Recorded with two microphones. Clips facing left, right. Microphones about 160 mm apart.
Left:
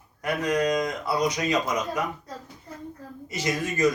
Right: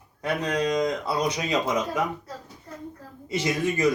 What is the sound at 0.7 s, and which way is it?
Speech, 25° right (ahead or behind).